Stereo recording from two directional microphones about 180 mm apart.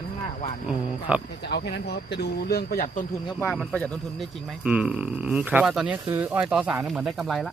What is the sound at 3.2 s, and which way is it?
Speech, 25° left (ahead or behind).